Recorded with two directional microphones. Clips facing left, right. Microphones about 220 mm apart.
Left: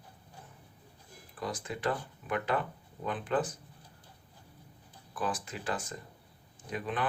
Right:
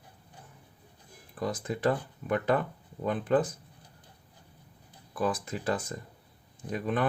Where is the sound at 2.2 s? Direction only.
45° right (ahead or behind).